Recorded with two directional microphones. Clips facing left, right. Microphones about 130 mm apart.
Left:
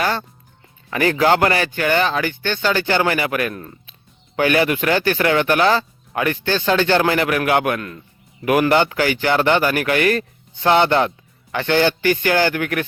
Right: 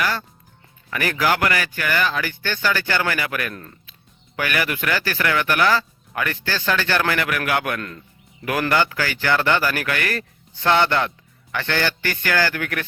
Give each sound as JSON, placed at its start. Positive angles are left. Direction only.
{"t": 0.0, "sound": "speech", "side_deg": 25}
{"t": 7.8, "sound": "speech", "side_deg": 10}
{"t": 8.7, "sound": "speech", "side_deg": 20}